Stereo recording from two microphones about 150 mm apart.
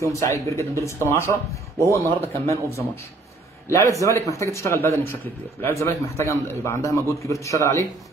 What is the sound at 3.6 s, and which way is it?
A man's voice, 20° left (ahead or behind).